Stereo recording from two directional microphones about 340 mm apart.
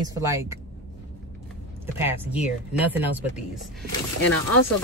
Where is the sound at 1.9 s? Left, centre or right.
Centre.